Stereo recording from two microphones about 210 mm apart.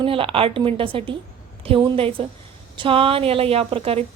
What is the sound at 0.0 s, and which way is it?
A woman's voice, 25° right (ahead or behind).